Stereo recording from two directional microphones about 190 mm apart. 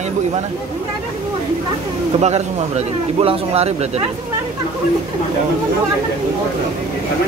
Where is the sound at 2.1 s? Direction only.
35° right (ahead or behind).